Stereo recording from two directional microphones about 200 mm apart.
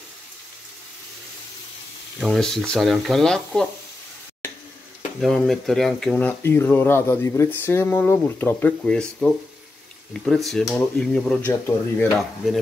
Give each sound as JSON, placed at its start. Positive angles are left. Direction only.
{"t": 2.1, "sound": "speech", "side_deg": 0}
{"t": 5.2, "sound": "speech", "side_deg": 0}